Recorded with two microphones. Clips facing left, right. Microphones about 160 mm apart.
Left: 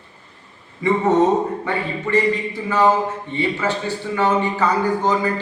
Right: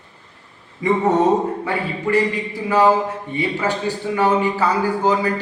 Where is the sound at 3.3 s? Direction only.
10° right (ahead or behind).